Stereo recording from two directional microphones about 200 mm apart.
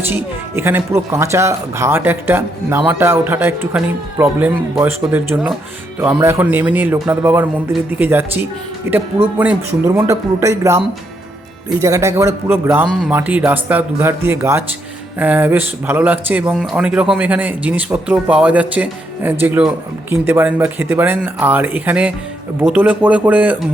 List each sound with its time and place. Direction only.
0.1 s speech: 10° right (ahead or behind)
11.8 s speech: 15° right (ahead or behind)